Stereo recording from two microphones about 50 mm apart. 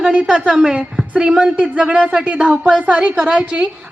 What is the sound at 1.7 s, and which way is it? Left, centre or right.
A woman's voice, right.